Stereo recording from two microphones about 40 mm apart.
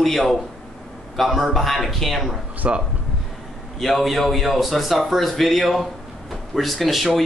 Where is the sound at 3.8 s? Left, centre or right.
Centre.